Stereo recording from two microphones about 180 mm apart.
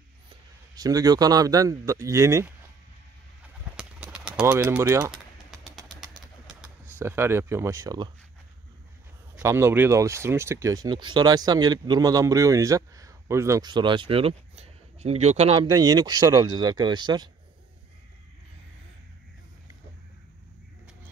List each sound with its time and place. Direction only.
0.7 s speech: 20° right (ahead or behind)
3.7 s bird: 5° right (ahead or behind)
4.4 s speech: 10° right (ahead or behind)
5.8 s pigeon: 5° right (ahead or behind); by 8.1 s 20° right (ahead or behind)
9.4 s speech: 15° right (ahead or behind); by 15.7 s 35° right (ahead or behind)
15.7 s speech: 20° right (ahead or behind)